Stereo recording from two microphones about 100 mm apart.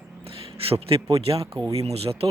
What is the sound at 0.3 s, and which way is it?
Speech, 70° right (ahead or behind).